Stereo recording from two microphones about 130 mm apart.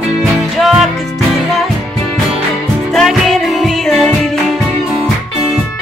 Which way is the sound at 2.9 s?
Centre (ahead or behind).